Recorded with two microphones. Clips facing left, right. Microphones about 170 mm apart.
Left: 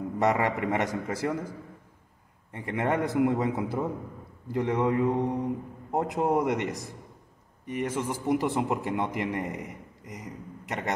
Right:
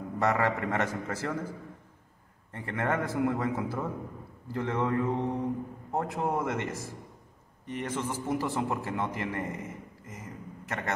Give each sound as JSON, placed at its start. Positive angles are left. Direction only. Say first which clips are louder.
{"t": 0.2, "sound": "a man's voice", "louder": "left 2 dB", "side_deg": 15}
{"t": 2.5, "sound": "a man's voice", "louder": "left 3 dB", "side_deg": 15}